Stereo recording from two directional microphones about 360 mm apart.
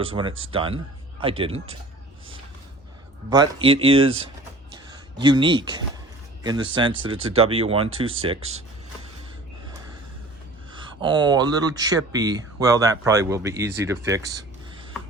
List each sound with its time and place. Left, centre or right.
0.0 s speech: centre
3.2 s speech: centre
4.7 s a sound: centre
6.4 s speech: centre
10.7 s speech: centre